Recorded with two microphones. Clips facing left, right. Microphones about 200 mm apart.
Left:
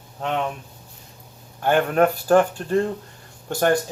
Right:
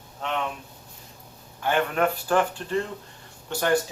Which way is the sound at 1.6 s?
45° left (ahead or behind).